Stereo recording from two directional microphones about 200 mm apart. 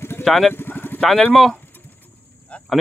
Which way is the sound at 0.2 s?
Centre (ahead or behind).